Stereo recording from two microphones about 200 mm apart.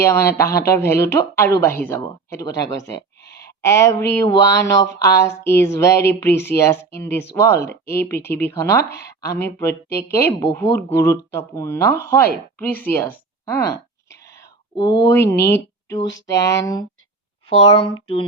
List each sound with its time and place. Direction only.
0.0 s speech: 15° left (ahead or behind)
3.2 s a sound: 55° left (ahead or behind)
3.6 s speech: 15° left (ahead or behind)
17.5 s speech: 30° left (ahead or behind)